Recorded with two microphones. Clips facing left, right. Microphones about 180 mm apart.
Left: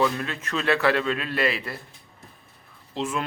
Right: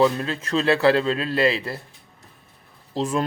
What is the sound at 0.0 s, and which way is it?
A man's voice, 30° right (ahead or behind).